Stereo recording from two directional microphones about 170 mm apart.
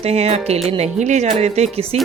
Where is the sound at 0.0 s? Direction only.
40° right (ahead or behind).